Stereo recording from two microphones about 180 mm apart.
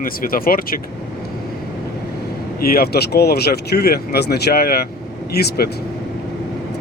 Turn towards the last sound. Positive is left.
turn(degrees=60)  # may be behind; listen again after turning